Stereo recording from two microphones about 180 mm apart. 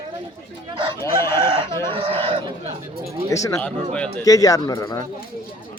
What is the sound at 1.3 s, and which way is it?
Chicken, 25° right (ahead or behind).